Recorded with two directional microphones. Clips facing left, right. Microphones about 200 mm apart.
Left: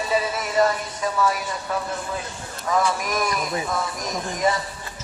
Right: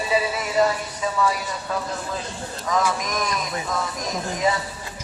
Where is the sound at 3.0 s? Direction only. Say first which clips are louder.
Left 2 dB; 5° left (ahead or behind).